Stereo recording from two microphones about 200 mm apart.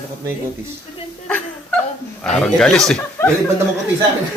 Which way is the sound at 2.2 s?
5° left (ahead or behind).